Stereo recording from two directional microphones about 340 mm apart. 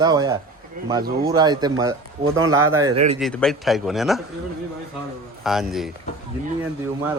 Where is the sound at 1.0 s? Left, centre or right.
Right.